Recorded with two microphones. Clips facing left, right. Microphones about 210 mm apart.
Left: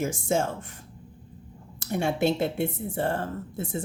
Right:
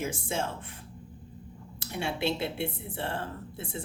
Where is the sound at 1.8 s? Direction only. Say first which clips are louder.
Left 7 dB; 45° left (ahead or behind).